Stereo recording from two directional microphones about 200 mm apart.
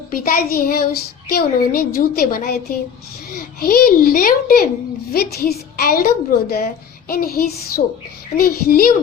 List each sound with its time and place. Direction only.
0.1 s child singing: 50° left (ahead or behind)